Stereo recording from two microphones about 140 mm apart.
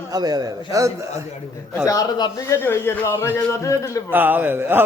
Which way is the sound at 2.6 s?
15° left (ahead or behind).